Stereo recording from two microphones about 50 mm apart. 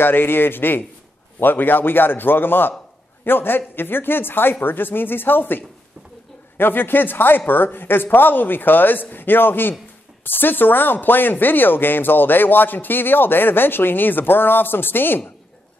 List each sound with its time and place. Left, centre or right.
0.0 s speech: left